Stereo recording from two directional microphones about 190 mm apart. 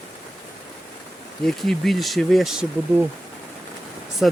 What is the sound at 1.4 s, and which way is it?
Speech, centre (ahead or behind).